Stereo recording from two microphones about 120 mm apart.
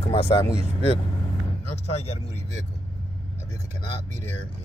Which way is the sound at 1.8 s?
65° left (ahead or behind).